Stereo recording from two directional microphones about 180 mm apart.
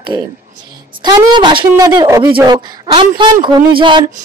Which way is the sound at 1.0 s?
25° right (ahead or behind).